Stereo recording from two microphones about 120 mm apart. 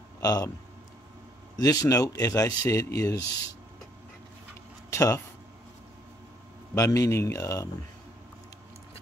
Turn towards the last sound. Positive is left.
turn(degrees=25)  # may be behind; listen again after turning